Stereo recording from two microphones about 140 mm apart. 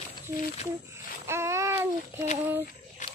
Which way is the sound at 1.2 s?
20° right (ahead or behind).